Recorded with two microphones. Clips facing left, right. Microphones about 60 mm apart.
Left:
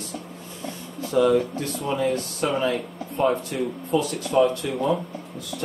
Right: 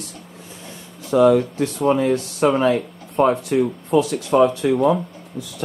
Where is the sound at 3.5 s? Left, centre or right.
Right.